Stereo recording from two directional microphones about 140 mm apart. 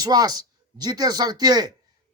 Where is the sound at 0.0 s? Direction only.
30° right (ahead or behind).